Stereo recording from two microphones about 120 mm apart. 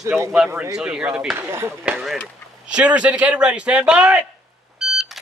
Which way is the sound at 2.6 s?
10° right (ahead or behind).